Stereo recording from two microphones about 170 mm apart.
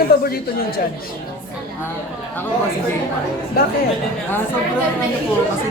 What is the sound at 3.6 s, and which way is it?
Speech, 60° left (ahead or behind).